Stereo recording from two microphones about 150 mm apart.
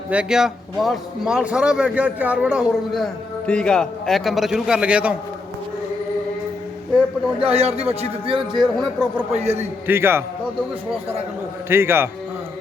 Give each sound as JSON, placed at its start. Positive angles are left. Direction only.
{"t": 0.1, "sound": "speech", "side_deg": -5}
{"t": 7.5, "sound": "speech", "side_deg": -45}
{"t": 8.5, "sound": "speech", "side_deg": -5}
{"t": 9.3, "sound": "speech", "side_deg": -45}
{"t": 9.8, "sound": "a man's voice", "side_deg": -15}
{"t": 11.7, "sound": "a man's voice", "side_deg": -15}